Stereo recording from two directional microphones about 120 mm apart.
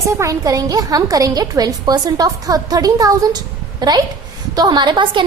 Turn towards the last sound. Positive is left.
turn(degrees=-40)  # may be behind; listen again after turning